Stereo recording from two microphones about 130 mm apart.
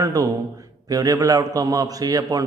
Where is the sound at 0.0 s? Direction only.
30° right (ahead or behind).